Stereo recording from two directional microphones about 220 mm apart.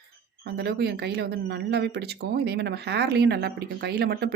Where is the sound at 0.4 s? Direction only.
45° right (ahead or behind).